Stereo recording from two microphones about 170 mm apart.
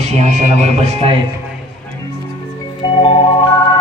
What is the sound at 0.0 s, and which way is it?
Speech, 40° right (ahead or behind).